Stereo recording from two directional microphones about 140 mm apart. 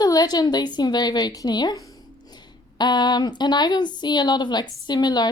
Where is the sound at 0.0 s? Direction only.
30° left (ahead or behind).